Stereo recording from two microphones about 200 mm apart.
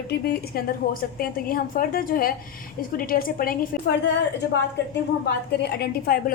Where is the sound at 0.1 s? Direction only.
50° left (ahead or behind).